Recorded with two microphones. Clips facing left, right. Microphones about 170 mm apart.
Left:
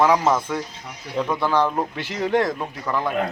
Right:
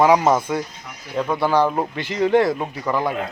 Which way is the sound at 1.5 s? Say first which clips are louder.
Right 3 dB; 10° right (ahead or behind).